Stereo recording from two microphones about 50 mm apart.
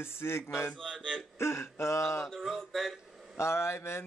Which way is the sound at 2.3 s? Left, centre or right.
Centre.